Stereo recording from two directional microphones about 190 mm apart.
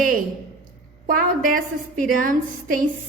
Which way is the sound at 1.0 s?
45° right (ahead or behind).